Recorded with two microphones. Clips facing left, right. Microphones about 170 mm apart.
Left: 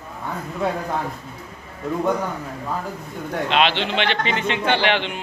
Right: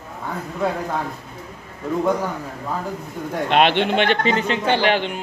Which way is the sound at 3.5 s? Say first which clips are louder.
Right 4 dB; 55° right (ahead or behind).